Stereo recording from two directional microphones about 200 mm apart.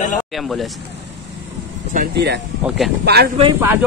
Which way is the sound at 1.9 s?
50° right (ahead or behind).